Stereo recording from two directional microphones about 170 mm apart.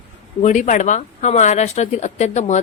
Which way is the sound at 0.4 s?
45° left (ahead or behind).